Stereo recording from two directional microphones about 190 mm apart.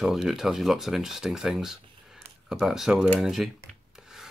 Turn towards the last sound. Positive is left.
turn(degrees=0)  # may be behind; listen again after turning